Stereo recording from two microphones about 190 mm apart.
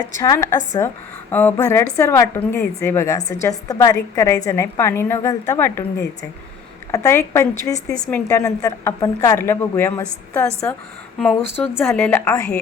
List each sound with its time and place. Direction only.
0.2 s a woman's voice: 15° left (ahead or behind)